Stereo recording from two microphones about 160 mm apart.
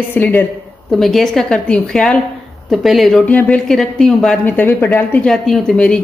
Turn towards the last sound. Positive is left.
turn(degrees=5)  # may be behind; listen again after turning